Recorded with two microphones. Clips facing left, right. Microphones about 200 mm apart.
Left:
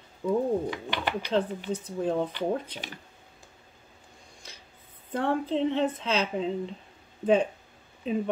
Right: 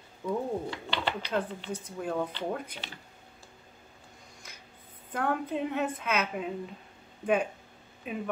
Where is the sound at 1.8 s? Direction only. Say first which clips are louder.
Left 4 dB; 25° left (ahead or behind).